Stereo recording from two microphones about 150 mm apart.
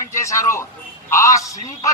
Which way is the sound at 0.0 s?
20° left (ahead or behind).